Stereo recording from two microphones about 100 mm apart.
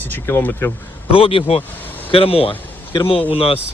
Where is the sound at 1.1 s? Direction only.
65° left (ahead or behind).